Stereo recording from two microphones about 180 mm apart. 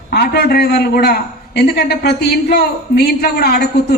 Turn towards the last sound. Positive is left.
turn(degrees=65)  # may be behind; listen again after turning